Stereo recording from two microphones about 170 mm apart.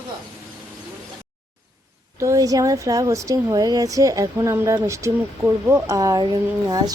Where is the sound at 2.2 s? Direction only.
20° right (ahead or behind).